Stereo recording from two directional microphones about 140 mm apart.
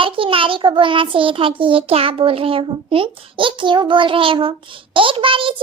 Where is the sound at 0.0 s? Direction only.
40° right (ahead or behind).